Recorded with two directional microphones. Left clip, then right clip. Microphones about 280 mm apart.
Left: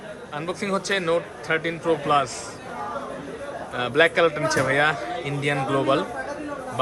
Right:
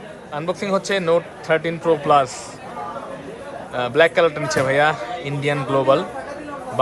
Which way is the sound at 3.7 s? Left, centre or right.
Centre.